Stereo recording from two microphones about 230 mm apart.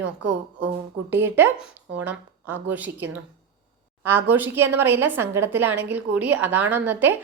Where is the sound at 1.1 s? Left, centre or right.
Centre.